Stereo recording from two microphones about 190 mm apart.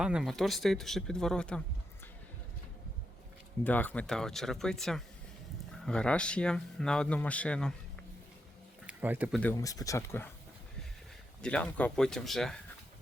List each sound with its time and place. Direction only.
0.0 s speech: 5° right (ahead or behind)
3.6 s speech: 10° left (ahead or behind)
8.9 s speech: 10° right (ahead or behind)
9.4 s speech: 15° left (ahead or behind)
11.4 s speech: 5° left (ahead or behind)